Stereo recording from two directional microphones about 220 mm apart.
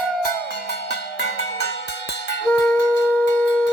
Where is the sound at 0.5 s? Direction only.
50° left (ahead or behind).